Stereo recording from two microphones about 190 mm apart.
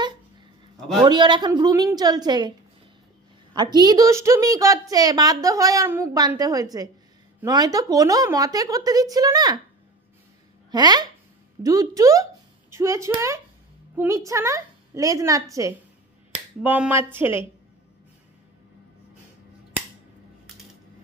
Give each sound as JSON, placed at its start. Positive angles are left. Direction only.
{"t": 1.0, "sound": "a woman's voice", "side_deg": -25}
{"t": 3.5, "sound": "a woman's voice", "side_deg": -20}
{"t": 10.7, "sound": "a woman's voice", "side_deg": -20}